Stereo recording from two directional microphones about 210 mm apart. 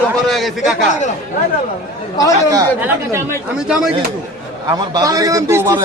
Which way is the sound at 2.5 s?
15° right (ahead or behind).